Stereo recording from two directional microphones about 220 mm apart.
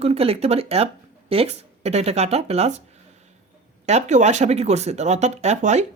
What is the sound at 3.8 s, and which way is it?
Speech, 30° right (ahead or behind).